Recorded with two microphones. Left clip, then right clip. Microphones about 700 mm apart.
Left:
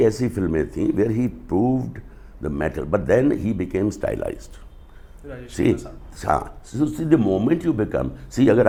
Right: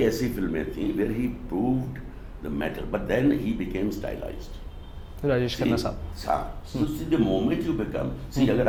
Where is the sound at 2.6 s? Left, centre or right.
Left.